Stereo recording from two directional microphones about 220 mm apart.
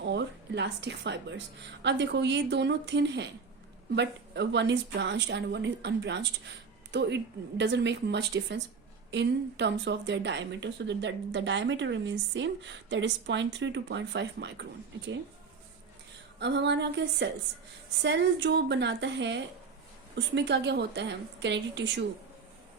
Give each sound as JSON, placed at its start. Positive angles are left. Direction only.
{"t": 0.0, "sound": "a sound", "side_deg": -50}
{"t": 1.8, "sound": "speech", "side_deg": -50}
{"t": 16.4, "sound": "speech", "side_deg": -50}